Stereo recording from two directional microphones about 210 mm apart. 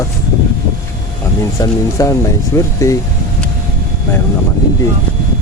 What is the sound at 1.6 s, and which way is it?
Speech, 15° left (ahead or behind).